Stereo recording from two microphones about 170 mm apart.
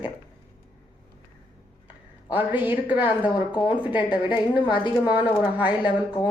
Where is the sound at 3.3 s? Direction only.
25° left (ahead or behind).